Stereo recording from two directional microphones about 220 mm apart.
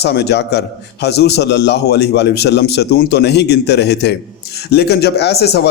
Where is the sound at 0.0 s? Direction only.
50° left (ahead or behind).